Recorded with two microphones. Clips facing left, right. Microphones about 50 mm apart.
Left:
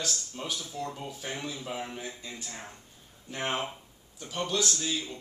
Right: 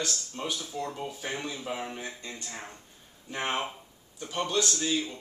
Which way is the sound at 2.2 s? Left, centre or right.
Centre.